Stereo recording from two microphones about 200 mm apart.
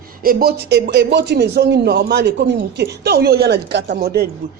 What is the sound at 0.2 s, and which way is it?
Speech, 45° right (ahead or behind).